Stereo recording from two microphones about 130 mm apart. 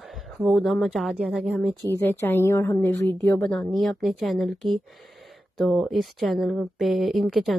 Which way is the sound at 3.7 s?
Centre (ahead or behind).